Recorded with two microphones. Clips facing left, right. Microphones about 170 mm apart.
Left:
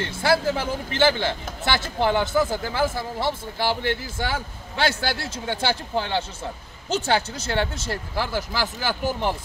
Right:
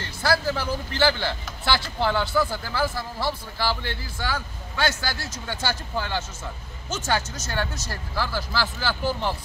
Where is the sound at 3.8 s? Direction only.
55° left (ahead or behind).